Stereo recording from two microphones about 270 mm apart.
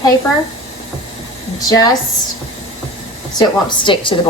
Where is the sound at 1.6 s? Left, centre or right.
Centre.